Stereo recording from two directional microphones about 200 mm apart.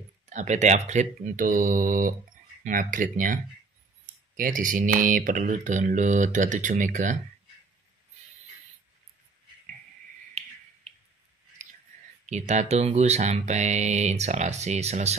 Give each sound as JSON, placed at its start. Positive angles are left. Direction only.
{"t": 0.3, "sound": "speech", "side_deg": -35}
{"t": 4.4, "sound": "speech", "side_deg": -40}
{"t": 10.9, "sound": "a sound", "side_deg": -30}
{"t": 11.6, "sound": "whispering", "side_deg": -35}
{"t": 12.3, "sound": "speech", "side_deg": -35}